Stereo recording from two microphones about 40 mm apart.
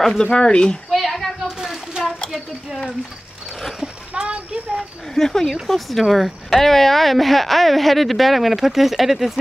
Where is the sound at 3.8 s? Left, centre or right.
Right.